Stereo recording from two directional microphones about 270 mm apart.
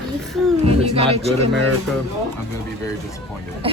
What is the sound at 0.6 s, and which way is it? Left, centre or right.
Speech, right.